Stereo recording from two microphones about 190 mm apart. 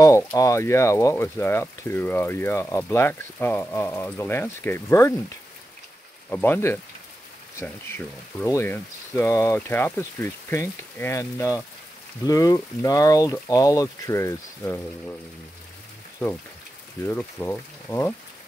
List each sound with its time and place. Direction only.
0.0 s speech: 15° left (ahead or behind)
6.3 s speech: 10° left (ahead or behind)
8.4 s speech: 15° left (ahead or behind)
17.0 s speech: 10° left (ahead or behind)